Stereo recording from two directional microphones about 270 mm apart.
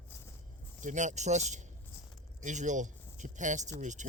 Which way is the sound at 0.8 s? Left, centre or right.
Right.